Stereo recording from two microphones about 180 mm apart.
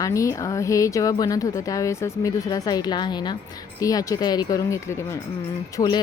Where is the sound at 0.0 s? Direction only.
15° left (ahead or behind).